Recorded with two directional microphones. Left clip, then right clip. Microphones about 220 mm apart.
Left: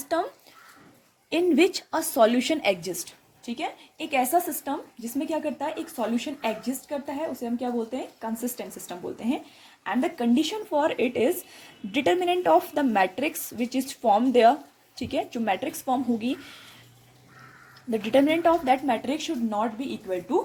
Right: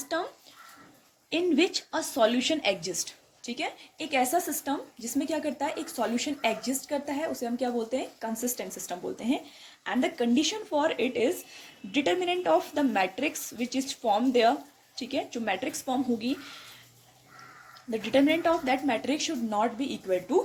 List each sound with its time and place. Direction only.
0.0 s speech: 30° left (ahead or behind)
1.3 s a woman's voice: 30° left (ahead or behind)
17.9 s speech: 25° left (ahead or behind); by 20.1 s 5° left (ahead or behind)